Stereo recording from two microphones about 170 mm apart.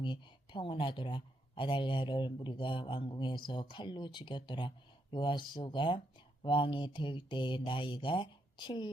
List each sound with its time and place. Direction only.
0.0 s speech: 30° left (ahead or behind)